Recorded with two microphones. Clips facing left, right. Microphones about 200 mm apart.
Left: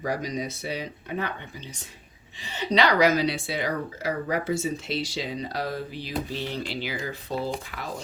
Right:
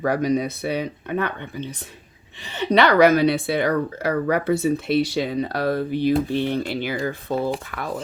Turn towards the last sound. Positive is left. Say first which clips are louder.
# right 6 dB
turn(degrees=-55)  # may be behind; listen again after turning